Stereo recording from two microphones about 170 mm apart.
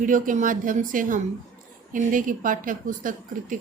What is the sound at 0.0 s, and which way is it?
Speech, 50° right (ahead or behind).